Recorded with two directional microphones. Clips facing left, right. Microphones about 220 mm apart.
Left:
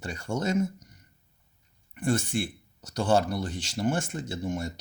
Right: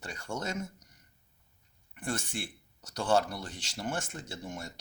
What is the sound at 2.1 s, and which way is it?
Speech, 10° left (ahead or behind).